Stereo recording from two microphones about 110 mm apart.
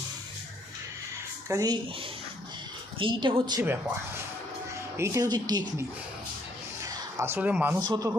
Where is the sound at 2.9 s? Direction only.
50° right (ahead or behind).